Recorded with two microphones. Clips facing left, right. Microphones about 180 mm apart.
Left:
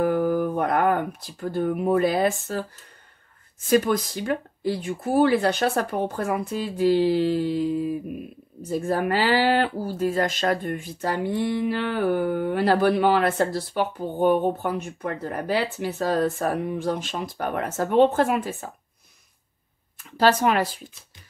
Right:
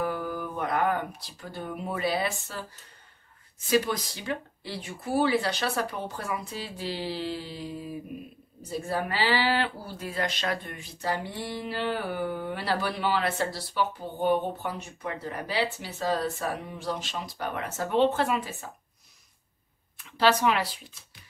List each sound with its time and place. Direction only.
0.0 s a sound: 50° left (ahead or behind)
3.5 s speech: 50° left (ahead or behind)
20.0 s speech: 45° left (ahead or behind)